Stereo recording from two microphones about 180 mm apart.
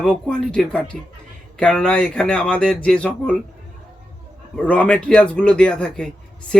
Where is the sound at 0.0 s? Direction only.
5° left (ahead or behind).